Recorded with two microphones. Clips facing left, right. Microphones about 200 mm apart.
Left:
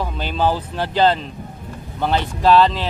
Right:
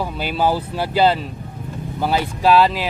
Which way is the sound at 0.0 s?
10° right (ahead or behind).